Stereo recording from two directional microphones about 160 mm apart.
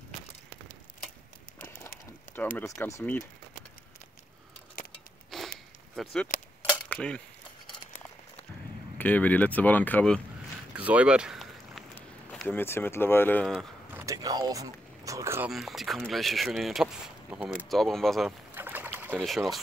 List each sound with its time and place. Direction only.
2.5 s speech: 15° left (ahead or behind)
5.3 s a sound: centre (ahead or behind)
6.0 s speech: centre (ahead or behind)
6.3 s cutlery: 55° left (ahead or behind)
6.9 s a sound: 5° left (ahead or behind)
8.9 s speech: 10° left (ahead or behind)
10.7 s boat: 10° right (ahead or behind)
12.3 s speech: 10° left (ahead or behind)
13.9 s speech: 20° right (ahead or behind)
15.5 s speech: centre (ahead or behind)
18.5 s bird: 10° right (ahead or behind)
19.1 s speech: centre (ahead or behind)